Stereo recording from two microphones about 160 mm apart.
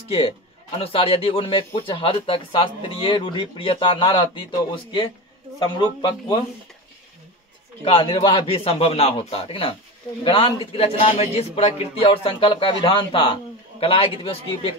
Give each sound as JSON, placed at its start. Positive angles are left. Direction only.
{"t": 0.1, "sound": "a man's voice", "side_deg": 35}
{"t": 7.8, "sound": "a man's voice", "side_deg": 35}